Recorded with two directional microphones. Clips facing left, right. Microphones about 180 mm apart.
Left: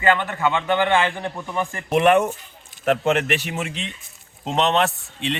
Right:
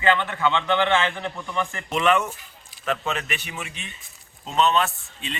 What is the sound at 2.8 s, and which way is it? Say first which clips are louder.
Speech: left 8 dB; 75° left (ahead or behind).